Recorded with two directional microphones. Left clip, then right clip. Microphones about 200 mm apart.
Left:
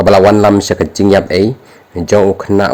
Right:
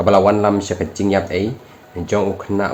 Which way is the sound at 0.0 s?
50° left (ahead or behind).